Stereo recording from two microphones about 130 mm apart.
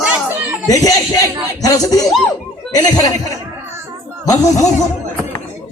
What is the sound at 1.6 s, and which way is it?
Speech, 30° left (ahead or behind).